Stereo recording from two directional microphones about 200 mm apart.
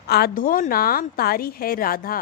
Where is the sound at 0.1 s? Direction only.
45° left (ahead or behind).